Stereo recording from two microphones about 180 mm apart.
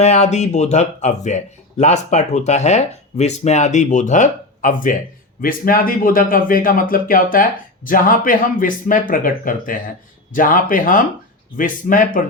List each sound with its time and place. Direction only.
0.0 s speech: 40° left (ahead or behind)